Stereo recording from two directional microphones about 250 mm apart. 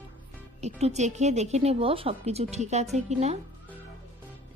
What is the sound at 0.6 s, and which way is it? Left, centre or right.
A woman's voice, right.